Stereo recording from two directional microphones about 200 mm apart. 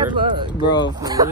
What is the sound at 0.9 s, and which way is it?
Speech, 20° right (ahead or behind).